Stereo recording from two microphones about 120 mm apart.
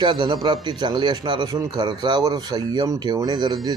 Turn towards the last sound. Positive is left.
turn(degrees=-35)  # may be behind; listen again after turning